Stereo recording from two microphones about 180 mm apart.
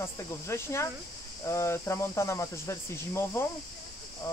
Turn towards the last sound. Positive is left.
turn(degrees=15)  # may be behind; listen again after turning